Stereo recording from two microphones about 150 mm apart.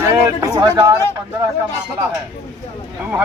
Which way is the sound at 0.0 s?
20° right (ahead or behind).